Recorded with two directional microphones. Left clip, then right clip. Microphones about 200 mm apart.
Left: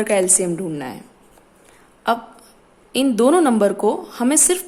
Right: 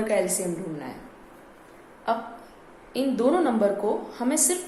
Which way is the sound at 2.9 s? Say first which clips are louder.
Left 8 dB; 45° left (ahead or behind).